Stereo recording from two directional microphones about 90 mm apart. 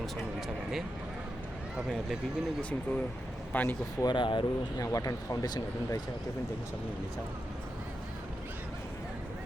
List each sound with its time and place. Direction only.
0.0 s a sound: centre (ahead or behind)
1.7 s speech: 5° right (ahead or behind)
2.6 s speech: 15° left (ahead or behind)
4.0 s speech: 60° left (ahead or behind)
4.8 s speech: 40° left (ahead or behind)